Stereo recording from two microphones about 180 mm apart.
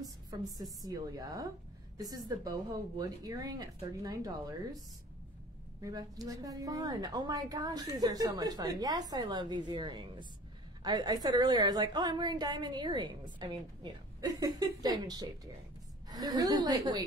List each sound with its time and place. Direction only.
0.8 s a woman's voice: 20° right (ahead or behind)
5.8 s a woman's voice: 20° right (ahead or behind)